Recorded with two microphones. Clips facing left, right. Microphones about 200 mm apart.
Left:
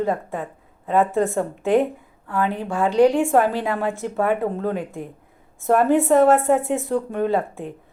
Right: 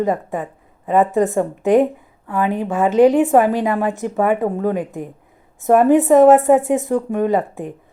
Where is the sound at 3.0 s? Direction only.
20° right (ahead or behind).